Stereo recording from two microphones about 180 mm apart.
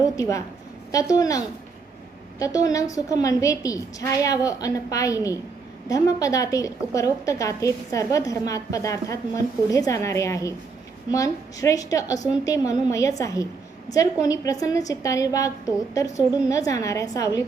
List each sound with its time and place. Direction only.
0.2 s a woman's voice: 20° left (ahead or behind)
2.6 s a woman's voice: 20° left (ahead or behind)